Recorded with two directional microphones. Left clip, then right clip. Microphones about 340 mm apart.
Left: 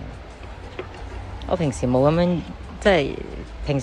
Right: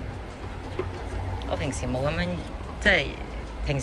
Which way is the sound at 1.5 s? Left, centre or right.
Centre.